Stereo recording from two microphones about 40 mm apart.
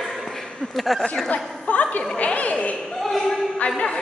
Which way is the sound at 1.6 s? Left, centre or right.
Left.